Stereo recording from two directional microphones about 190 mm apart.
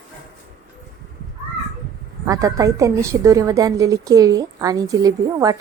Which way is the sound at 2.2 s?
15° right (ahead or behind).